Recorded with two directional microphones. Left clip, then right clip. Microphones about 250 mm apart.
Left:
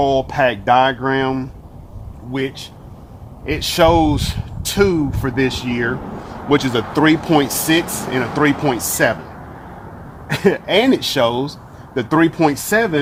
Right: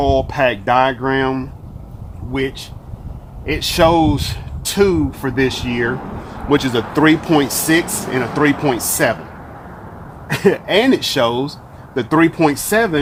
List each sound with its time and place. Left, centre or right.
0.0 s speech: left
3.4 s speech: centre
10.2 s speech: centre